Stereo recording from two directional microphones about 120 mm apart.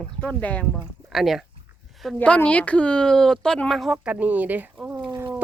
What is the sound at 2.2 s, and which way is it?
Speech, 10° left (ahead or behind).